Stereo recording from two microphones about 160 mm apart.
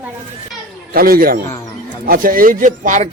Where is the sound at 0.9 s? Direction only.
70° right (ahead or behind).